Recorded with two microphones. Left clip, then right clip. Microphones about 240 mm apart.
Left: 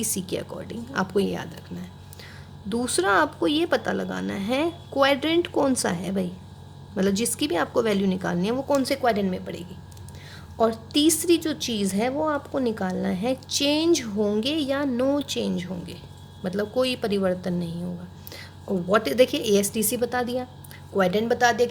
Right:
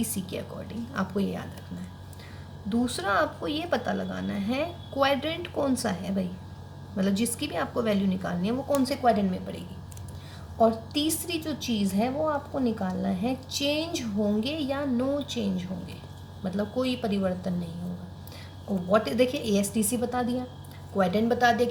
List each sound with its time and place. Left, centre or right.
0.0 s a woman's voice: left
2.6 s a woman's voice: left
10.6 s a woman's voice: left
18.9 s a woman's voice: left